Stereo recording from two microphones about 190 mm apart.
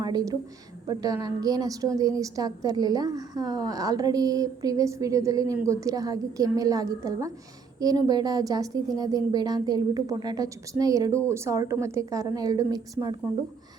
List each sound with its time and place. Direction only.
0.0 s a woman's voice: 20° right (ahead or behind)